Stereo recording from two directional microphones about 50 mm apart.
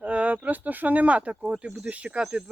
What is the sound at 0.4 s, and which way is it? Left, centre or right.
Speech, right.